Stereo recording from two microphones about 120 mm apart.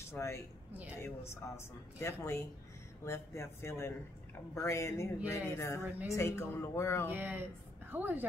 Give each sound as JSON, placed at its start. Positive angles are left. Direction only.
{"t": 0.0, "sound": "speech", "side_deg": 20}
{"t": 7.1, "sound": "speech", "side_deg": -15}